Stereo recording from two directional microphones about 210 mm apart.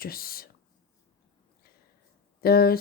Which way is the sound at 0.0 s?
45° left (ahead or behind).